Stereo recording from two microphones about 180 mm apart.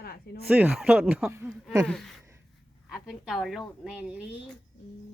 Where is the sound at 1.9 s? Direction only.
Centre (ahead or behind).